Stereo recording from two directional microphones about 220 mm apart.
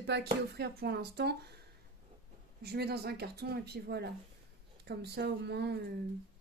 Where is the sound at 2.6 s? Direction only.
45° right (ahead or behind).